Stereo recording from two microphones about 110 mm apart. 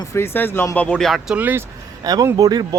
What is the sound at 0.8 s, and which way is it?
Speech, 10° left (ahead or behind).